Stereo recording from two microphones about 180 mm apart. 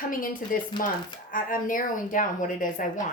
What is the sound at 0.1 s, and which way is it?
A woman's voice, 50° left (ahead or behind).